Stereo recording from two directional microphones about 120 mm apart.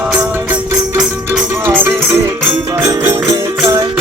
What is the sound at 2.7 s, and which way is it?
Music, 25° right (ahead or behind).